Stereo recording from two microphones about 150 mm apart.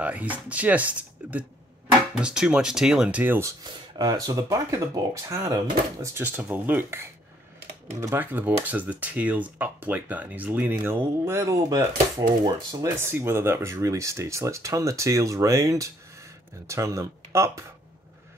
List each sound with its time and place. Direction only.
0.0 s speech: 10° right (ahead or behind)